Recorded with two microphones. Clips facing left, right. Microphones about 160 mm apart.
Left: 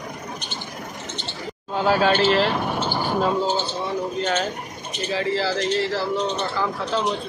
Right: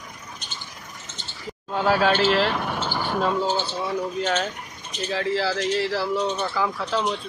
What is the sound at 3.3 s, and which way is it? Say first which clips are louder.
Speech: left 1 dB; 25° left (ahead or behind).